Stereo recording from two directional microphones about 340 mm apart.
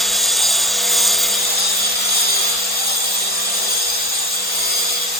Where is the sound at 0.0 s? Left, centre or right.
Centre.